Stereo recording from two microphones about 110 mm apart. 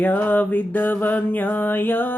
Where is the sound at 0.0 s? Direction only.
15° left (ahead or behind).